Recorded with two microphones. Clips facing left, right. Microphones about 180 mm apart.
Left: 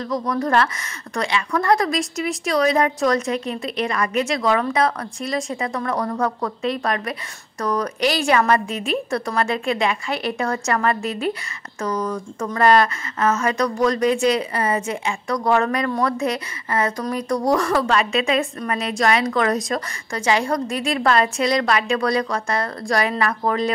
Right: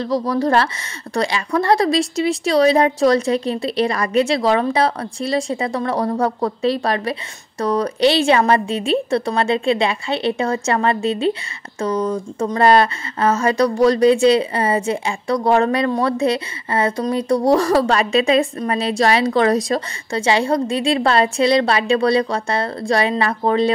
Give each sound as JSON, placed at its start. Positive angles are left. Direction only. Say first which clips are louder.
{"t": 0.0, "sound": "speech", "louder": "right 4 dB", "side_deg": -30}